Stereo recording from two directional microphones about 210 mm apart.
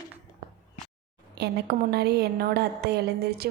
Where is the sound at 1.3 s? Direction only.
50° right (ahead or behind).